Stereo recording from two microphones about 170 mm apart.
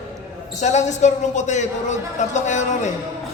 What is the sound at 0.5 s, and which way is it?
A man's voice, 45° left (ahead or behind).